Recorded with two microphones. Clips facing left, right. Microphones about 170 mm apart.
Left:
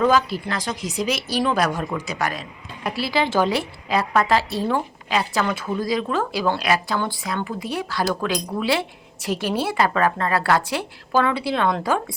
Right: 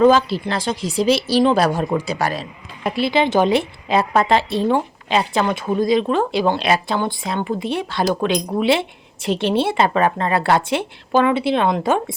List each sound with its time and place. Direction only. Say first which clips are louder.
0.0 s speech: right 5 dB; 30° right (ahead or behind)